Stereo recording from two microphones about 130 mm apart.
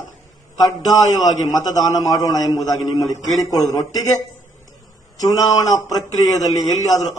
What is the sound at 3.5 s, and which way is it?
Speech, 30° left (ahead or behind).